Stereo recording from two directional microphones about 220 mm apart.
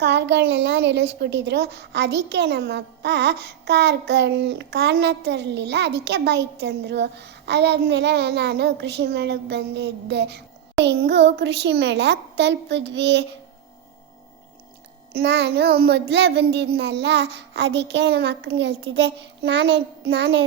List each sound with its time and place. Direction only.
0.0 s a woman's voice: 50° right (ahead or behind)
15.1 s a woman's voice: 50° right (ahead or behind)